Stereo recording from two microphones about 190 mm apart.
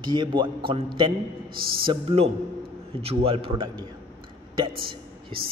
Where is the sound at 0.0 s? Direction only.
25° right (ahead or behind).